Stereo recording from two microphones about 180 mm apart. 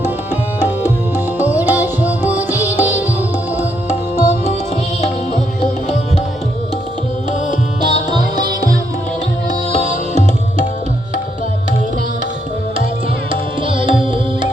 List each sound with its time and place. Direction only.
1.4 s music: 10° right (ahead or behind)
3.6 s music: 40° left (ahead or behind)
9.7 s tabla: 40° left (ahead or behind)
13.7 s music: 30° right (ahead or behind)